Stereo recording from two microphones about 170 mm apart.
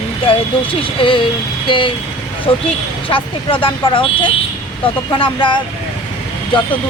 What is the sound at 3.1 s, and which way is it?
Speech, 30° left (ahead or behind).